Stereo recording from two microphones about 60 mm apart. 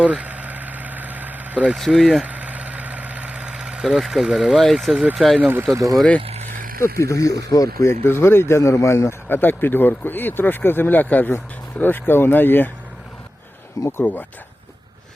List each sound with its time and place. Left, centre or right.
0.0 s vehicle: right
1.7 s speech: centre
2.2 s vehicle: right; by 4.5 s centre
4.5 s speech: centre
5.4 s speech: right
5.7 s speech: right
6.7 s speech: left
7.9 s speech: left
9.4 s speech: left